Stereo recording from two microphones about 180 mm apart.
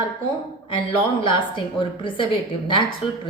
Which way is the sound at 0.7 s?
30° left (ahead or behind).